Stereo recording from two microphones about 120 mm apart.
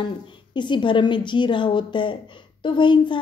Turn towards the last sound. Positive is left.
turn(degrees=40)  # may be behind; listen again after turning